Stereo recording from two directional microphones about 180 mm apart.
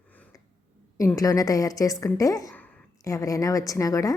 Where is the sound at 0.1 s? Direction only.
10° left (ahead or behind).